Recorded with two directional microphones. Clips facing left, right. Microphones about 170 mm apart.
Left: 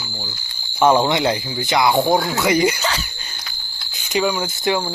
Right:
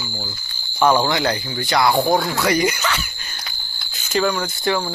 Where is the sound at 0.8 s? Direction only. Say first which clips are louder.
Left 2 dB; 25° left (ahead or behind).